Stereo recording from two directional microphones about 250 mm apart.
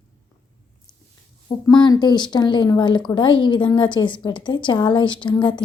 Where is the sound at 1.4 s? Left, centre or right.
Centre.